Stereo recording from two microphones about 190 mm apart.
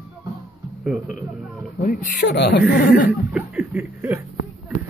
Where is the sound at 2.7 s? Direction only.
55° left (ahead or behind).